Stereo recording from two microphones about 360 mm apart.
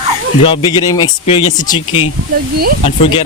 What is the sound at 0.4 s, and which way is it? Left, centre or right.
Speech, centre.